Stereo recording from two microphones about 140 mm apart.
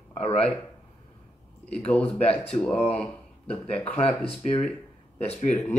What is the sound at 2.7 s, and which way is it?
Speech, 50° left (ahead or behind).